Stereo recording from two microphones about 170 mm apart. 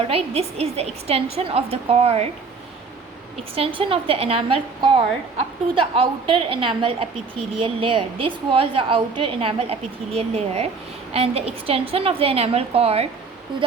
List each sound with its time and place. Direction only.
0.0 s a woman's voice: 35° right (ahead or behind)
3.5 s a woman's voice: 35° right (ahead or behind)